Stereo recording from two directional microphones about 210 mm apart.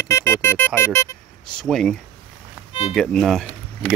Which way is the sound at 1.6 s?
Centre (ahead or behind).